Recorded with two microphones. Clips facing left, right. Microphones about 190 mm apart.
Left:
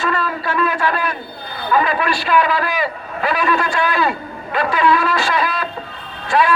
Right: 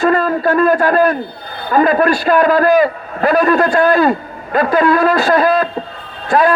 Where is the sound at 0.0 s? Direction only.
45° right (ahead or behind).